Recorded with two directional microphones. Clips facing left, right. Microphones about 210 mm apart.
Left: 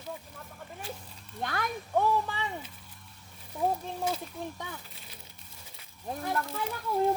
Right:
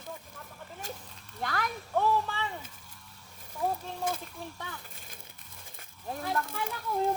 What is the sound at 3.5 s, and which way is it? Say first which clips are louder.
Speech: left 2 dB; 20° left (ahead or behind).